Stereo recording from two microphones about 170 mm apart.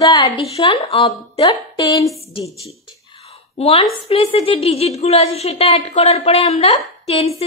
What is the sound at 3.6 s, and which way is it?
A woman's voice, 35° left (ahead or behind).